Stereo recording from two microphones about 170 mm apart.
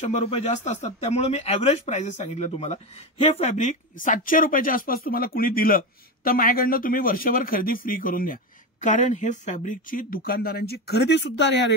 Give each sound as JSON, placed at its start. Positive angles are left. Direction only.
{"t": 0.0, "sound": "speech", "side_deg": 40}